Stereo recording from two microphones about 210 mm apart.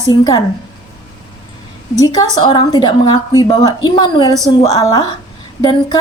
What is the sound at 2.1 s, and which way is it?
A woman's voice, 20° left (ahead or behind).